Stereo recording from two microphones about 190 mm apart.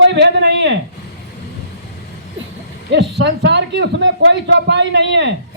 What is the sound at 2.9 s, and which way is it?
Speech, 65° right (ahead or behind).